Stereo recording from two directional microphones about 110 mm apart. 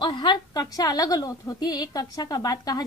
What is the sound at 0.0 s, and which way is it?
A woman's voice, 45° left (ahead or behind).